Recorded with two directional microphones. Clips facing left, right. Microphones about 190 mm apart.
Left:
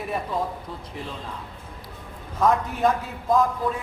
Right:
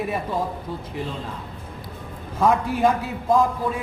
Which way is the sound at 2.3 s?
10° right (ahead or behind).